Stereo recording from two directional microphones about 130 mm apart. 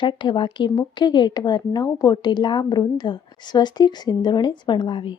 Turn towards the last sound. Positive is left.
turn(degrees=40)  # may be behind; listen again after turning